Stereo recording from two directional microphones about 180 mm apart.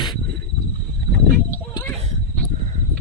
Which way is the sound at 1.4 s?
15° left (ahead or behind).